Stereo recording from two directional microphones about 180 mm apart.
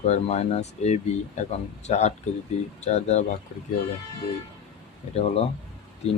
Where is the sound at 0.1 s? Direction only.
35° left (ahead or behind).